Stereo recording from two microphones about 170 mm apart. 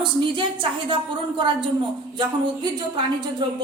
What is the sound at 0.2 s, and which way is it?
A woman's voice, 30° right (ahead or behind).